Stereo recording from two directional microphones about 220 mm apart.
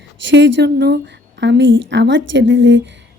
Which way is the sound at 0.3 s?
55° right (ahead or behind).